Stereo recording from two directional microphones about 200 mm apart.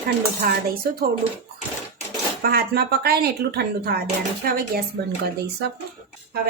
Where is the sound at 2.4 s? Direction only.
50° right (ahead or behind).